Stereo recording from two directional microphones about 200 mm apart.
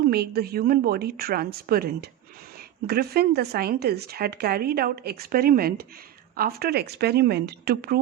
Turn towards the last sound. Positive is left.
turn(degrees=-50)  # may be behind; listen again after turning